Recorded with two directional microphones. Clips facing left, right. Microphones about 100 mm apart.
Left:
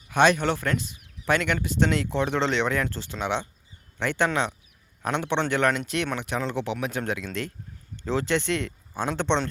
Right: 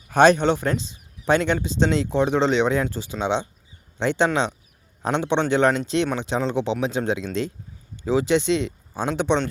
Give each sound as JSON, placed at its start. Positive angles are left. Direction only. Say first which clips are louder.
{"t": 0.1, "sound": "speech", "louder": "right 5 dB", "side_deg": -35}
{"t": 0.4, "sound": "speech", "louder": "right 4 dB", "side_deg": -20}